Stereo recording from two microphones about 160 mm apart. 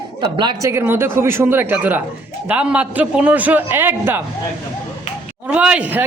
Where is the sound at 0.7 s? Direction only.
15° right (ahead or behind).